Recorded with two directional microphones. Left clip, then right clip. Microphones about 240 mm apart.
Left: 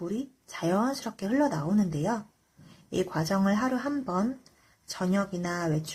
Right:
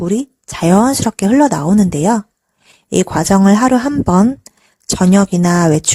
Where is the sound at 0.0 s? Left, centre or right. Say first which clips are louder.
Right 16 dB; right.